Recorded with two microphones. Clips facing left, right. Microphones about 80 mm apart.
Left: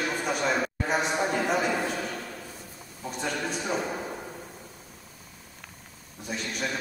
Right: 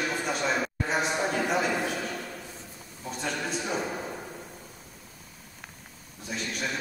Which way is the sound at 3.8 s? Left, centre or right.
Centre.